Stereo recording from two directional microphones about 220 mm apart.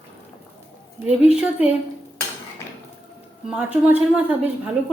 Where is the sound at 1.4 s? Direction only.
5° right (ahead or behind).